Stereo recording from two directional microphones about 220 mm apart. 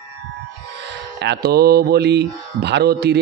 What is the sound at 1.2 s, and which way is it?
A man's voice, 50° right (ahead or behind).